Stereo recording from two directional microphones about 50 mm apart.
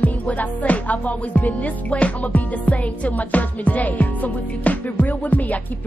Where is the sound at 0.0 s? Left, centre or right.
Left.